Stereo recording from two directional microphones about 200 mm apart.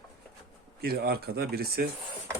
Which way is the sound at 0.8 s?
50° right (ahead or behind).